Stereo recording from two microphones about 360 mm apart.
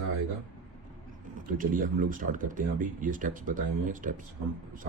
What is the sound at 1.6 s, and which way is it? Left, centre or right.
Speech, right.